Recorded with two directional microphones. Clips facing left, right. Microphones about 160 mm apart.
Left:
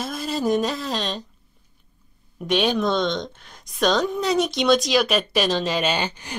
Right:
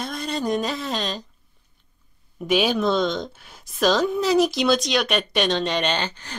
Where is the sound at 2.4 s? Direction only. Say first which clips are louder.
Even; 5° right (ahead or behind).